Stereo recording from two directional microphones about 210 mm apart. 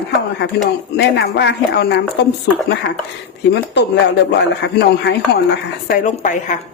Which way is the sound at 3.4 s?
55° left (ahead or behind).